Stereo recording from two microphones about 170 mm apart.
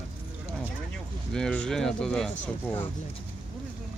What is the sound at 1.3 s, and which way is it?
Speech, 5° left (ahead or behind).